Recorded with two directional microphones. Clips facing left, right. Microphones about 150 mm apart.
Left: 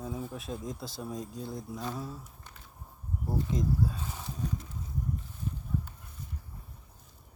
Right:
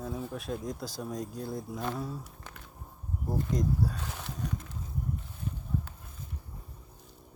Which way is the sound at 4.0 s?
80° right.